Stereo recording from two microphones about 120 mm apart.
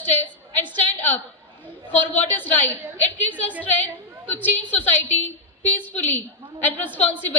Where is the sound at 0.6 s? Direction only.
15° left (ahead or behind).